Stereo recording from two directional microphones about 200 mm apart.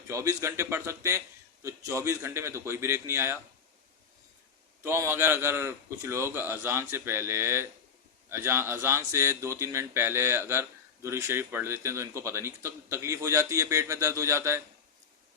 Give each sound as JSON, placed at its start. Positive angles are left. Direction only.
{"t": 0.1, "sound": "speech", "side_deg": -15}
{"t": 4.8, "sound": "speech", "side_deg": -15}